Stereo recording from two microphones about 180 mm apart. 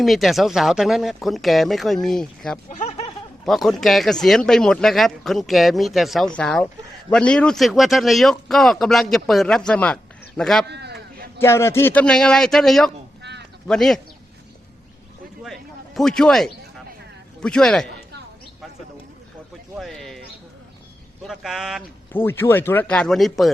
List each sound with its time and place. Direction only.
0.0 s a man's voice: centre (ahead or behind)
2.6 s snicker: 40° left (ahead or behind)
3.4 s a man's voice: centre (ahead or behind)
10.7 s a sound: 65° right (ahead or behind)
11.3 s a man's voice: 15° left (ahead or behind)
15.4 s a sound: centre (ahead or behind)
17.4 s a man's voice: 5° left (ahead or behind)
19.7 s a sound: centre (ahead or behind)
21.2 s a man's voice: centre (ahead or behind)
22.1 s speech: 10° left (ahead or behind)